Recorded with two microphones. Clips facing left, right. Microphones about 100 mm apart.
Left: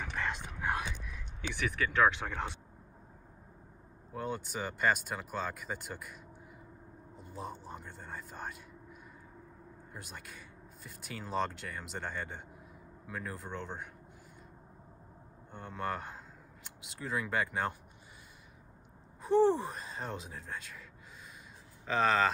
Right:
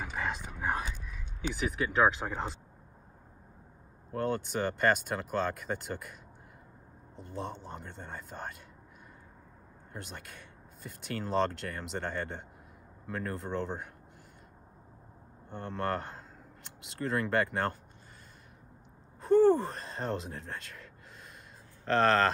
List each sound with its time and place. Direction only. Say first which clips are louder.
0.0 s whispering: right 2 dB; 5° right (ahead or behind)
1.7 s speech: right 1 dB; 5° right (ahead or behind)
4.1 s speech: right 6 dB; 5° left (ahead or behind)
7.2 s speech: right 4 dB; 5° left (ahead or behind)
9.9 s speech: right 4 dB; 5° left (ahead or behind)
15.5 s speech: right 4 dB; centre (ahead or behind)
19.4 s speech: right 4 dB; 10° left (ahead or behind)